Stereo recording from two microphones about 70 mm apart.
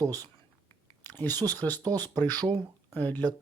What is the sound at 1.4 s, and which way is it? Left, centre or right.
Speech, right.